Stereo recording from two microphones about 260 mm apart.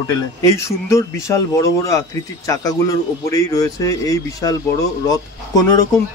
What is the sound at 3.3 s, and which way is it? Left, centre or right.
Speech, centre.